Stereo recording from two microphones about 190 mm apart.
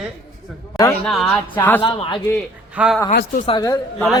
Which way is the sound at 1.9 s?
25° left (ahead or behind).